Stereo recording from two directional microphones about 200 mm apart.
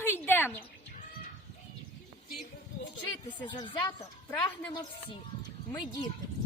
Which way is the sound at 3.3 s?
20° left (ahead or behind).